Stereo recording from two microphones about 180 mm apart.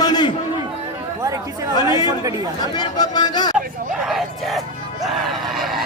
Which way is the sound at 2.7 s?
25° left (ahead or behind).